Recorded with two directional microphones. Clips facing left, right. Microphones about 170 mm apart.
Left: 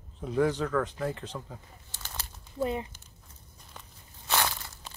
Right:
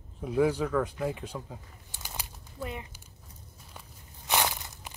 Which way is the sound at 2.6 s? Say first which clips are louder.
Left 8 dB; 30° left (ahead or behind).